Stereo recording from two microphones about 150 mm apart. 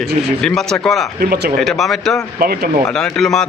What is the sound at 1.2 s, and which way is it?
Speech, 90° right.